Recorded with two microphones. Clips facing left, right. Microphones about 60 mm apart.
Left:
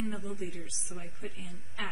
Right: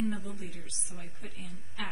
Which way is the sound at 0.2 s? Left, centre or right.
Centre.